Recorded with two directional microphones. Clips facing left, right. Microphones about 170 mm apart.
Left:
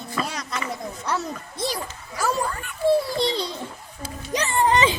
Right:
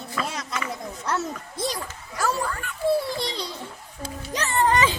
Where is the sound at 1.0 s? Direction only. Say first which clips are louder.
Right 1 dB; centre (ahead or behind).